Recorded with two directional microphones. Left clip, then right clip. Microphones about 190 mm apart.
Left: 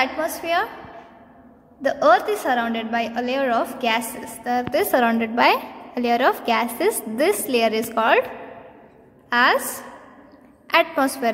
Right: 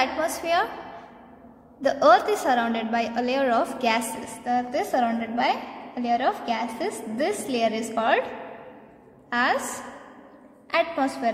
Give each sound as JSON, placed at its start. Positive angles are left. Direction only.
{"t": 0.0, "sound": "a woman's voice", "side_deg": 15}
{"t": 1.8, "sound": "a woman's voice", "side_deg": 10}
{"t": 4.5, "sound": "a woman's voice", "side_deg": 30}
{"t": 9.3, "sound": "a woman's voice", "side_deg": 25}